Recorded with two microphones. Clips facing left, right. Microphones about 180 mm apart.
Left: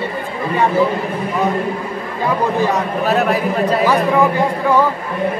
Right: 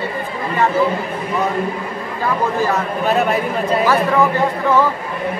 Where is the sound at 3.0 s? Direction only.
Centre (ahead or behind).